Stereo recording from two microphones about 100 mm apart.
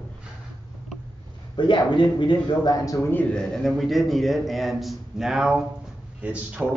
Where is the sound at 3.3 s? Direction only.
5° left (ahead or behind).